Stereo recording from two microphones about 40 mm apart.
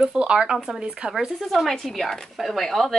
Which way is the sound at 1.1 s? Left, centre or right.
Centre.